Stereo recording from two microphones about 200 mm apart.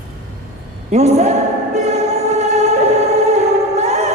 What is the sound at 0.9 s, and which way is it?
Choir, 35° right (ahead or behind).